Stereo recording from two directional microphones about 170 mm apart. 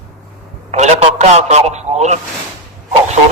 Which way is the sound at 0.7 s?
40° right (ahead or behind).